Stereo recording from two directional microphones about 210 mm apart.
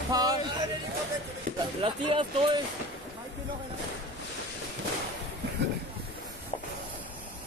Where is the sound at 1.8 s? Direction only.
25° right (ahead or behind).